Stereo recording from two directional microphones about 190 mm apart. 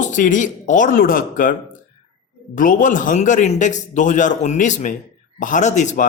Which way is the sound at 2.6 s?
45° left (ahead or behind).